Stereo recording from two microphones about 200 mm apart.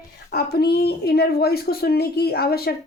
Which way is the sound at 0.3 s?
50° left (ahead or behind).